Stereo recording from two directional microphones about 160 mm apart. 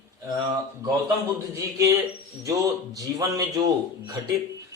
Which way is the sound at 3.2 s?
25° right (ahead or behind).